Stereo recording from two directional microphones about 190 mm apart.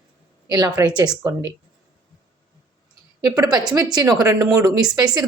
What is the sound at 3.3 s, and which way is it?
Speech, 20° right (ahead or behind).